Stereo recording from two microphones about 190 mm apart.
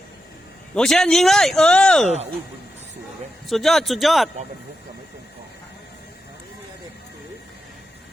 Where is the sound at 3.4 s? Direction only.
Centre (ahead or behind).